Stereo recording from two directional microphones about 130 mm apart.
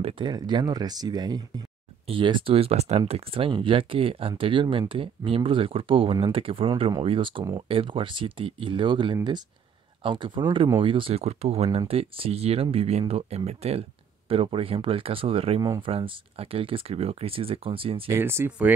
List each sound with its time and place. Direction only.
0.0 s speech: 35° right (ahead or behind)
18.1 s speech: 20° right (ahead or behind)